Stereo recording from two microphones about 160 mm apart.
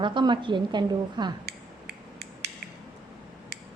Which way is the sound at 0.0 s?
30° right (ahead or behind).